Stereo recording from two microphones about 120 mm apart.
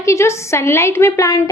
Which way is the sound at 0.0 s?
25° left (ahead or behind).